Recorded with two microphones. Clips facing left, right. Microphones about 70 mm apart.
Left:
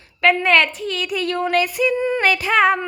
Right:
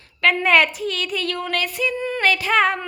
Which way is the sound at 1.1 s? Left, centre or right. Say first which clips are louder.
Left 5 dB; centre.